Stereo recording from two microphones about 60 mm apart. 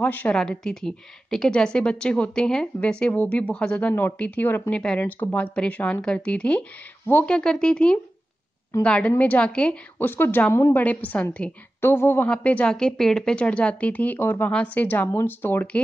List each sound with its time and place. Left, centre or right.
0.0 s speech: left
0.3 s a woman's voice: centre
9.9 s a woman's voice: left
11.8 s a woman's voice: left
12.3 s speech: left
12.7 s a woman's voice: centre; by 15.6 s left